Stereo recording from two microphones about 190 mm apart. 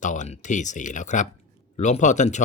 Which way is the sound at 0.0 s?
40° left (ahead or behind).